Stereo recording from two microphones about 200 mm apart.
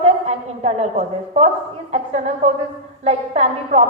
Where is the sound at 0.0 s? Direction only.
35° right (ahead or behind).